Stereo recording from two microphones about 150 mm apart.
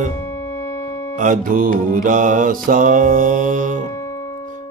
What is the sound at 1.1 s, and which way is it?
Mantra, 60° right (ahead or behind).